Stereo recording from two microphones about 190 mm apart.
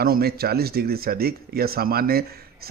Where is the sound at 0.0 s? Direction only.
55° right (ahead or behind).